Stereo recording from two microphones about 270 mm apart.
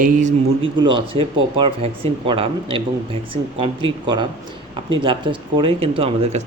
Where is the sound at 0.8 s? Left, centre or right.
Centre.